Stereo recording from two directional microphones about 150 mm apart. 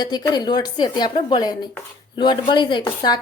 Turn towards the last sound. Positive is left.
turn(degrees=30)  # may be behind; listen again after turning